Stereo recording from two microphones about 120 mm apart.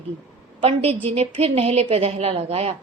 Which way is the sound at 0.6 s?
55° right (ahead or behind).